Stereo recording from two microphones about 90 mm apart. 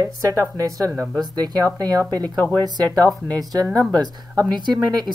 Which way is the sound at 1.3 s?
45° right (ahead or behind).